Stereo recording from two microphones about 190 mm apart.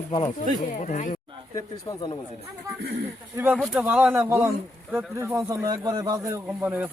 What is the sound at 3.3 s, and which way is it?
Speech, 10° right (ahead or behind).